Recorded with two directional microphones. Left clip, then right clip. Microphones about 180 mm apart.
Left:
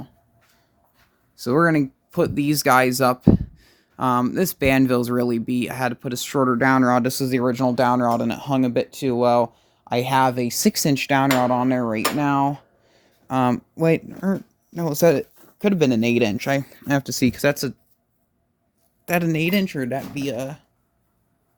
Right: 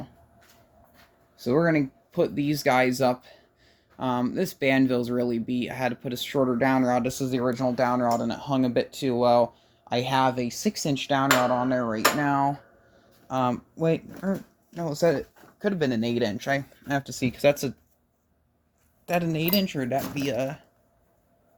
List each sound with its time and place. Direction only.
1.4 s speech: 45° left (ahead or behind); by 12.0 s 75° left (ahead or behind)
12.2 s speech: 60° left (ahead or behind); by 17.4 s 80° left
19.0 s speech: 55° left (ahead or behind)
19.8 s speech: 45° left (ahead or behind)